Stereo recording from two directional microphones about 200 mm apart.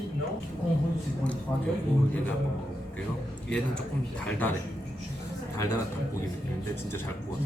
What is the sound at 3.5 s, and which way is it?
Speech, 5° left (ahead or behind).